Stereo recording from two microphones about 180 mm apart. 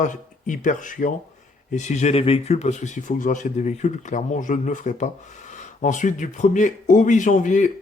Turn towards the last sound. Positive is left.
turn(degrees=45)  # may be behind; listen again after turning